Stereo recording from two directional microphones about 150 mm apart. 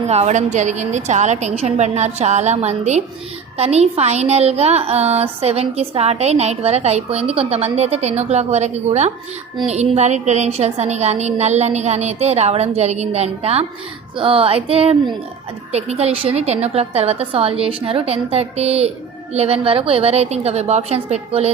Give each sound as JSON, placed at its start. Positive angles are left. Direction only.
{"t": 0.1, "sound": "a woman's voice", "side_deg": -50}